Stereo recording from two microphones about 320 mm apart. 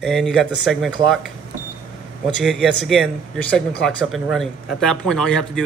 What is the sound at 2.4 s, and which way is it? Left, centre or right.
Speech, centre.